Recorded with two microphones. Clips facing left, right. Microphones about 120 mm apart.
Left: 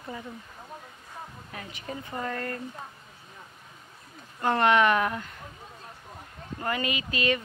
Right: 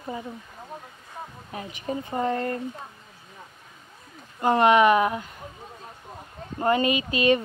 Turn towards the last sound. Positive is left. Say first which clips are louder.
# right 7 dB
turn(degrees=-25)  # may be behind; listen again after turning